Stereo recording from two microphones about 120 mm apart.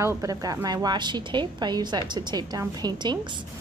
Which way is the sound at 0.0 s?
30° right (ahead or behind).